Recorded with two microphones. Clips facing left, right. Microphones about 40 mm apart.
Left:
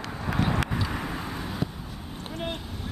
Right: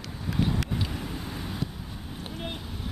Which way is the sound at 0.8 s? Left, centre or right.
Left.